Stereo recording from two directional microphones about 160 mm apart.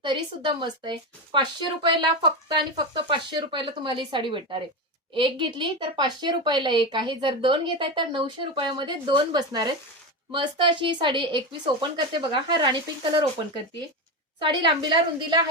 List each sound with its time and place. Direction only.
0.0 s a woman's voice: 30° right (ahead or behind)
14.3 s speech: 30° right (ahead or behind)